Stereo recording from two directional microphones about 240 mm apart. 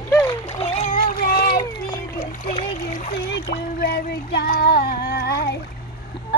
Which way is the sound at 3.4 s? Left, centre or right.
Left.